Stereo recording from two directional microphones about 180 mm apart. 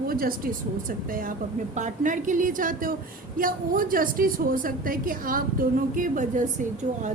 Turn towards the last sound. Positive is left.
turn(degrees=-45)  # may be behind; listen again after turning